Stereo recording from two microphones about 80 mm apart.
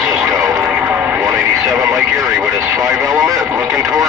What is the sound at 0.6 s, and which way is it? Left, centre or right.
Vehicle, centre.